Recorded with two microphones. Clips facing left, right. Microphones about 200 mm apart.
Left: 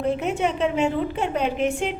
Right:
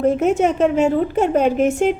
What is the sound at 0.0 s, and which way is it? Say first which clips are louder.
A woman's voice: right 7 dB; 45° right (ahead or behind).